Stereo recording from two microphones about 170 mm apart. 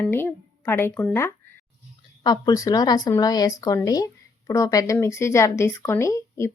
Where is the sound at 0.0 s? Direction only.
15° left (ahead or behind).